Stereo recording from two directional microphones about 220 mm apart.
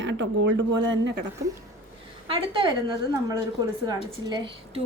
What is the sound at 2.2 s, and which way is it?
Speech, 25° right (ahead or behind).